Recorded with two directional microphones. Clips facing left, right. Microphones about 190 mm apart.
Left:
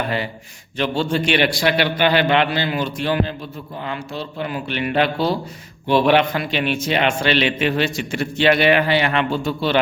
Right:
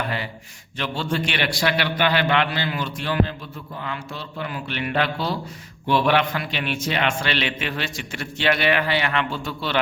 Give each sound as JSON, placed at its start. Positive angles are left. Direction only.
{"t": 0.8, "sound": "a man's voice", "side_deg": 25}